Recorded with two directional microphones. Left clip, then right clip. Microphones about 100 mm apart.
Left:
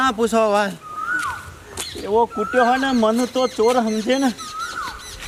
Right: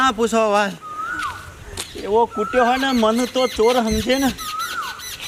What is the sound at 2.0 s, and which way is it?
Speech, centre (ahead or behind).